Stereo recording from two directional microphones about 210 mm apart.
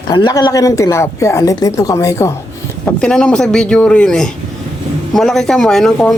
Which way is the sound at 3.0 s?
5° left (ahead or behind).